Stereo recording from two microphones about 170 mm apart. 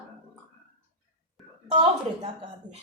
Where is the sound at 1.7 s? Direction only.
30° right (ahead or behind).